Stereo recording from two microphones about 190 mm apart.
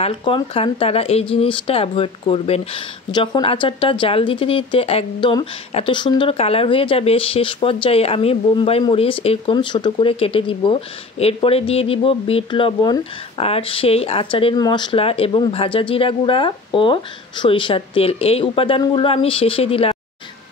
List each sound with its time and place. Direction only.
0.0 s speech: 30° left (ahead or behind)